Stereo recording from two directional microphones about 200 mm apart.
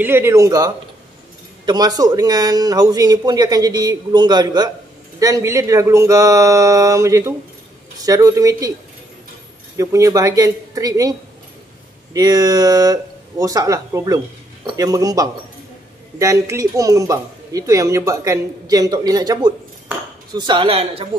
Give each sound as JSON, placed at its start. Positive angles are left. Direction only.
{"t": 0.0, "sound": "speech", "side_deg": -10}
{"t": 1.7, "sound": "speech", "side_deg": -20}
{"t": 9.8, "sound": "speech", "side_deg": -15}